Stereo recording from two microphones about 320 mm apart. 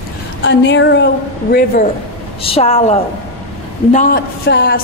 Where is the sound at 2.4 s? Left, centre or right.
Centre.